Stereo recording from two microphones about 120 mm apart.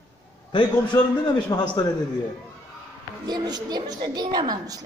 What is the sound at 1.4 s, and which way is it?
Speech, 35° left (ahead or behind).